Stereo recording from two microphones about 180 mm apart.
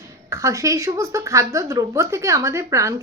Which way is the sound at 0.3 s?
15° right (ahead or behind).